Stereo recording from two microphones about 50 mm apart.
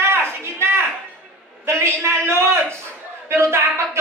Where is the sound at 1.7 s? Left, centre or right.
Right.